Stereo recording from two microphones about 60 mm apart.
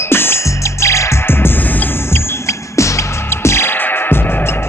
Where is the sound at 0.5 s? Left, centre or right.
Left.